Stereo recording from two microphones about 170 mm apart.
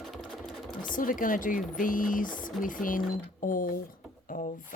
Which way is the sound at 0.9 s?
55° left (ahead or behind).